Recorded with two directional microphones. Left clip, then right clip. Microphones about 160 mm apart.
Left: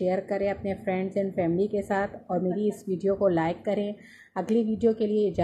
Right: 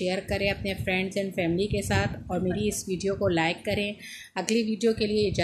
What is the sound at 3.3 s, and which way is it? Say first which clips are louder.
A woman's voice: even; 5° left (ahead or behind).